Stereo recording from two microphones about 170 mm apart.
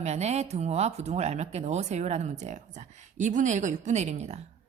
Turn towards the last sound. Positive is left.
turn(degrees=-40)  # may be behind; listen again after turning